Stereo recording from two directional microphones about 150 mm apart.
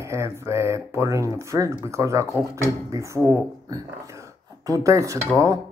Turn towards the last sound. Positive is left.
turn(degrees=-20)  # may be behind; listen again after turning